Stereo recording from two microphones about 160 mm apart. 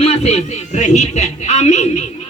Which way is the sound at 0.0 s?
40° left (ahead or behind).